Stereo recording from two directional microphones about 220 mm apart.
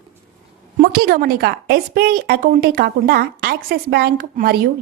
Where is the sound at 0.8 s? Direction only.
40° right (ahead or behind).